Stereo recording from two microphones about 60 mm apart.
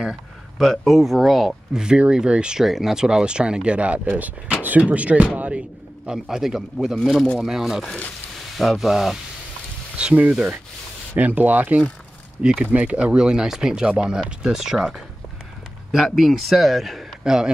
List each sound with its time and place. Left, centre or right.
0.6 s speech: centre
2.6 s speech: centre
6.1 s speech: centre
9.9 s speech: right
12.4 s speech: centre
12.6 s speech: right